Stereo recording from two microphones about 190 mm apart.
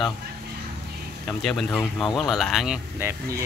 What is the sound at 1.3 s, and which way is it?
Speech, centre (ahead or behind).